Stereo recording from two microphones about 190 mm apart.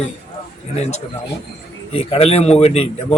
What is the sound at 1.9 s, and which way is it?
A man's voice, 30° left (ahead or behind).